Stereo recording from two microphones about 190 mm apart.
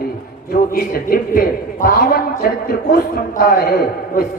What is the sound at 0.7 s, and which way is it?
A man's voice, 50° left (ahead or behind).